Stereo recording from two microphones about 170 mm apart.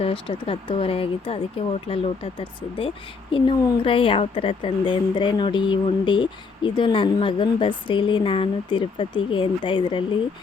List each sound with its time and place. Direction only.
0.0 s speech: 35° left (ahead or behind)